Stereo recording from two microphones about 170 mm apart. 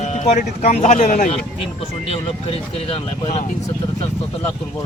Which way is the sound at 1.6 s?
35° left (ahead or behind).